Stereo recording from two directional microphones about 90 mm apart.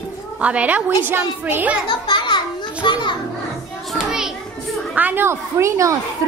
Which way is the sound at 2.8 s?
60° left (ahead or behind).